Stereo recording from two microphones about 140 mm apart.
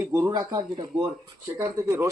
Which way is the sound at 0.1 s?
25° right (ahead or behind).